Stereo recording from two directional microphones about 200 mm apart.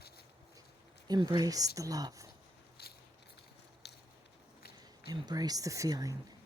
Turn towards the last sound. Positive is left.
turn(degrees=-20)  # may be behind; listen again after turning